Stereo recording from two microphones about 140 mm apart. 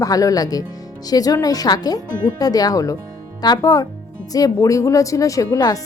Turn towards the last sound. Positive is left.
turn(degrees=25)  # may be behind; listen again after turning